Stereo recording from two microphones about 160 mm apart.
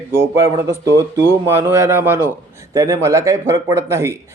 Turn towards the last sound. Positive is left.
turn(degrees=-15)  # may be behind; listen again after turning